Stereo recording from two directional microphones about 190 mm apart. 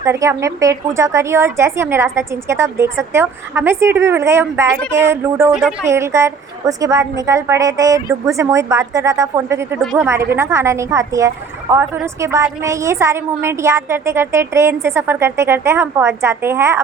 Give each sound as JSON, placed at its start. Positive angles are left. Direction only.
{"t": 0.0, "sound": "a woman's voice", "side_deg": -15}
{"t": 9.8, "sound": "a woman's voice", "side_deg": 0}
{"t": 10.3, "sound": "a woman's voice", "side_deg": -15}